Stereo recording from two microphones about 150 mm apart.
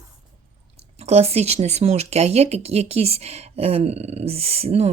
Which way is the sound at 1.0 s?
45° right (ahead or behind).